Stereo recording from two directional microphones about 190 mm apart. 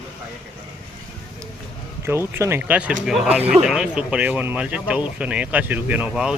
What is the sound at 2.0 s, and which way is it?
Speech, 15° right (ahead or behind).